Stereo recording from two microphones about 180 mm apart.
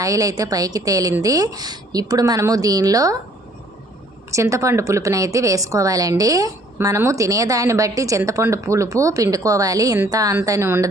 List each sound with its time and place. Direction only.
0.0 s a woman's voice: 20° right (ahead or behind)
4.3 s a woman's voice: 15° right (ahead or behind)